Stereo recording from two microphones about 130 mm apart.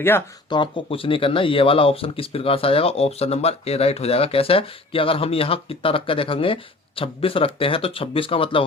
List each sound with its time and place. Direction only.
0.5 s speech: 40° left (ahead or behind)